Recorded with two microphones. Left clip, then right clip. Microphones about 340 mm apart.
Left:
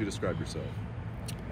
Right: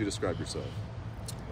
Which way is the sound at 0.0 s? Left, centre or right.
Right.